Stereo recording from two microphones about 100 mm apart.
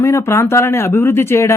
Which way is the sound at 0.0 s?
30° left (ahead or behind).